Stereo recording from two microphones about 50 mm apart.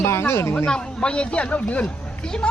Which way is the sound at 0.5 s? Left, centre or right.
Centre.